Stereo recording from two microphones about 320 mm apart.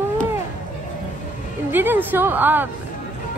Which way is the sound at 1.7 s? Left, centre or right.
Centre.